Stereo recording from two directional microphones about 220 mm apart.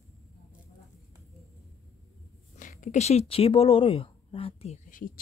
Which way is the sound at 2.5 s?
35° left (ahead or behind).